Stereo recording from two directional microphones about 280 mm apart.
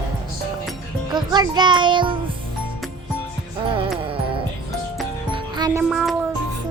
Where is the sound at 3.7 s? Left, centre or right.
Centre.